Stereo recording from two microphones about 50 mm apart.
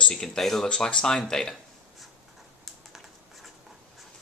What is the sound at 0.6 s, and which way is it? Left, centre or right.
Speech, centre.